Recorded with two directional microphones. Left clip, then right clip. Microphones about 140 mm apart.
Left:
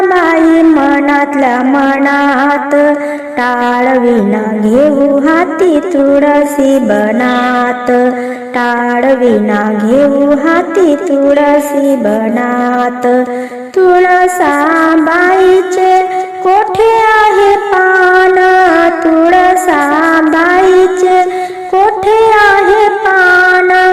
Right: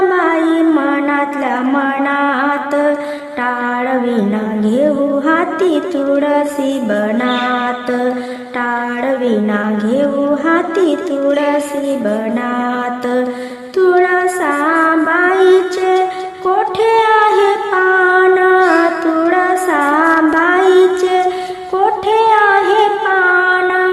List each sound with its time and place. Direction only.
0.1 s a sound: 35° left (ahead or behind)
5.2 s music: 30° left (ahead or behind)
9.0 s a woman's voice: 35° left (ahead or behind)
10.4 s brass instrument: 35° left (ahead or behind)
13.7 s child singing: 30° left (ahead or behind)
16.5 s shofar: 30° left (ahead or behind)
22.0 s a sound: 30° left (ahead or behind)